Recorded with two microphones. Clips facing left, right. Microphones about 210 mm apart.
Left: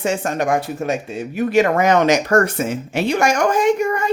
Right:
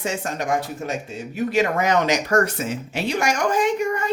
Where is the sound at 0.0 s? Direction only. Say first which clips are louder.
Left 6 dB; 60° left (ahead or behind).